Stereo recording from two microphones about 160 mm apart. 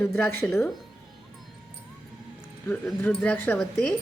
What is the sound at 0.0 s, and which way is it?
Speech, 15° left (ahead or behind).